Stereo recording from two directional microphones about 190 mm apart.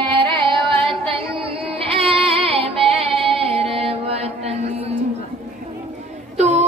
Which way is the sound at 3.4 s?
30° right (ahead or behind).